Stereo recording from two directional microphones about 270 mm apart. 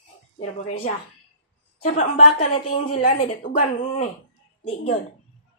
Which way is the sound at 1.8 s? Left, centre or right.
Left.